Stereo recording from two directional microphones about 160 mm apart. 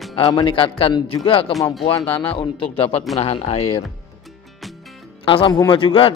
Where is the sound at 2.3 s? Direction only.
35° left (ahead or behind).